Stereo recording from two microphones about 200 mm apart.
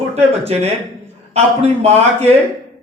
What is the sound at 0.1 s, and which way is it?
Speech, 30° right (ahead or behind).